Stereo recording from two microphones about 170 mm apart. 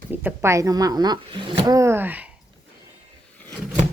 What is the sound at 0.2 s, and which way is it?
Speech, 15° right (ahead or behind).